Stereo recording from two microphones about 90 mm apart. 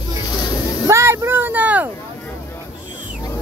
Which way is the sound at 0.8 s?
35° right (ahead or behind).